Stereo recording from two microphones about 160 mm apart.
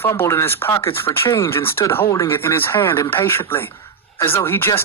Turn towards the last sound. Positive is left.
turn(degrees=15)  # may be behind; listen again after turning